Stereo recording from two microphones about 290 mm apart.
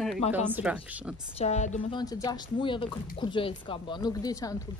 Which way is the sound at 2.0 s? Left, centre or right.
Centre.